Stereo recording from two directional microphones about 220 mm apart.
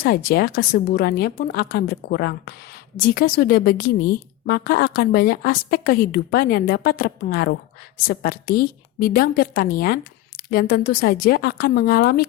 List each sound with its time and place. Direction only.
0.0 s a woman's voice: 45° left (ahead or behind)